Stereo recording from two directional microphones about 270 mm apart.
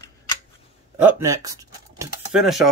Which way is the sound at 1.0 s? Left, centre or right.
Centre.